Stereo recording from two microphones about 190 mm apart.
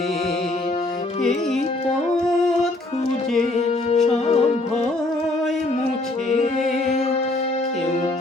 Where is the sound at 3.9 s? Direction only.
35° left (ahead or behind).